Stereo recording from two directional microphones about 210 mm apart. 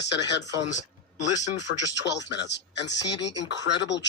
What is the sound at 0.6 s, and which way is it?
Speech, 35° left (ahead or behind).